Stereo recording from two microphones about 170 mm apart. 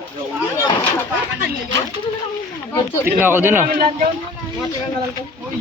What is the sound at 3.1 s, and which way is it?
Speech, 10° right (ahead or behind).